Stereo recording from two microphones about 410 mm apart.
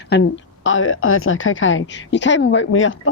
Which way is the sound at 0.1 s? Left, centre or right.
Left.